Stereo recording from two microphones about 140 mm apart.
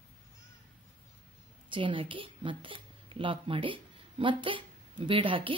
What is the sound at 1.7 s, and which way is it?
Speech, 35° right (ahead or behind).